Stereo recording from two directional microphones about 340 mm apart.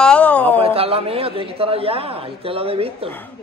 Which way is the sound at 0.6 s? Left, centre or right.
Centre.